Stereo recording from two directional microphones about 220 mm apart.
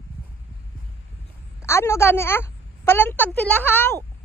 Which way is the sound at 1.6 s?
10° left (ahead or behind).